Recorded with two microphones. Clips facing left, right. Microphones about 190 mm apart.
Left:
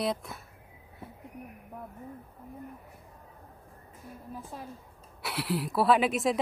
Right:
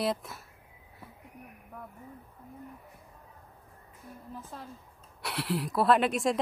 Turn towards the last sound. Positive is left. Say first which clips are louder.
# even
turn(degrees=0)  # may be behind; listen again after turning